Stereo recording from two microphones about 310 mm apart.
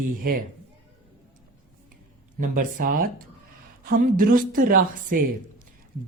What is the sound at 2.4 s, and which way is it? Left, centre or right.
Speech, right.